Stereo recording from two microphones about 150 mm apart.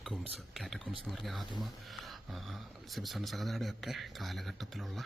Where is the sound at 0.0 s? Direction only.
Centre (ahead or behind).